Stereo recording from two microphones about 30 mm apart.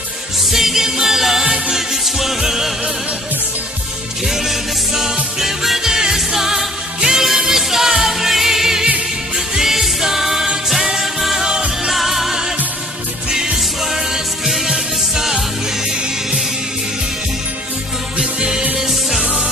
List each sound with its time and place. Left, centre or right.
0.5 s music: centre
2.0 s music: centre
4.3 s music: centre
11.3 s music: right
11.9 s music: centre
13.3 s music: right
14.7 s music: centre
18.1 s music: right
18.8 s music: centre